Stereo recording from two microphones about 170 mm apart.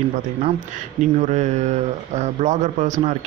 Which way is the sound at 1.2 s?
45° right (ahead or behind).